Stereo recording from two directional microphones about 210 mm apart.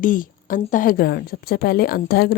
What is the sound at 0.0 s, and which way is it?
A woman's voice, 40° left (ahead or behind).